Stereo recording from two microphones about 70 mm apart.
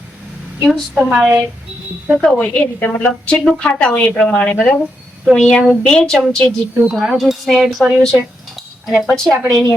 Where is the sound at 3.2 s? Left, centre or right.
Centre.